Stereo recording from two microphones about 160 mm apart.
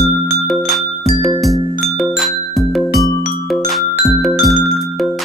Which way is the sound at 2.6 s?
Centre (ahead or behind).